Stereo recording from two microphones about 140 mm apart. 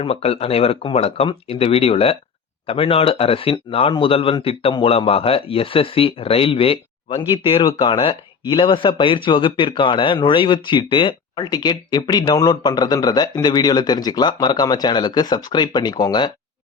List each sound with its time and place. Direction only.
0.0 s speech: 45° left (ahead or behind)